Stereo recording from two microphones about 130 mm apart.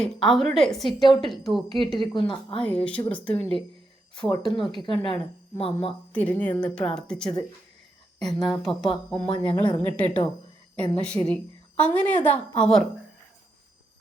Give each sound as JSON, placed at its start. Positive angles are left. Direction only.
{"t": 0.0, "sound": "a woman's voice", "side_deg": 0}
{"t": 2.0, "sound": "a woman's voice", "side_deg": 40}
{"t": 2.6, "sound": "a woman's voice", "side_deg": 10}
{"t": 4.5, "sound": "a woman's voice", "side_deg": 35}
{"t": 6.1, "sound": "a woman's voice", "side_deg": 10}